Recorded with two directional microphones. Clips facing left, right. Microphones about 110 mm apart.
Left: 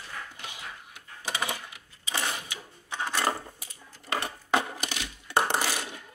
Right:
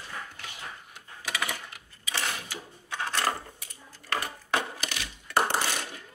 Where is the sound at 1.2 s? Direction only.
30° left (ahead or behind).